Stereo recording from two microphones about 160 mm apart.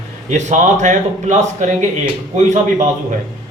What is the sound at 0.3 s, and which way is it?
A man's voice, 50° right (ahead or behind).